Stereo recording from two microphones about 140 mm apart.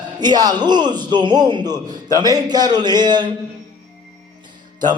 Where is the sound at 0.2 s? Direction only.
30° right (ahead or behind).